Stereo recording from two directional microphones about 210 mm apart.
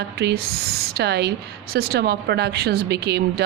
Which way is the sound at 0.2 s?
50° right (ahead or behind).